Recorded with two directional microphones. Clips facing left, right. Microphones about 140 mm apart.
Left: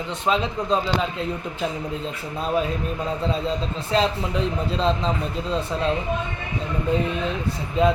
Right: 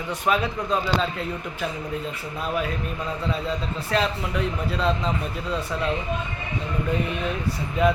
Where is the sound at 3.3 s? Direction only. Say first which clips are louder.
Left 2 dB; 25° left (ahead or behind).